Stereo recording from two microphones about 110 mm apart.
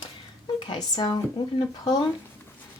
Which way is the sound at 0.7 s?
40° left (ahead or behind).